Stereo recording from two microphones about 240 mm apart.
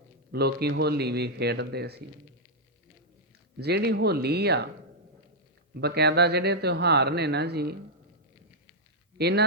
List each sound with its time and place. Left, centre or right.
0.3 s speech: right
3.6 s speech: right
5.7 s speech: right
9.1 s speech: right